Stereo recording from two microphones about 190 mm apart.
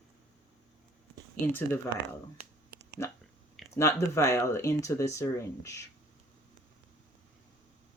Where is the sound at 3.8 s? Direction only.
15° left (ahead or behind).